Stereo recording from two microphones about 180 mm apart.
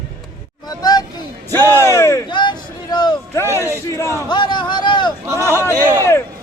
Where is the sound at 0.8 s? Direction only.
20° left (ahead or behind).